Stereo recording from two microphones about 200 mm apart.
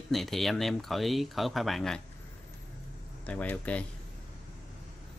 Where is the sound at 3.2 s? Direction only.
5° left (ahead or behind).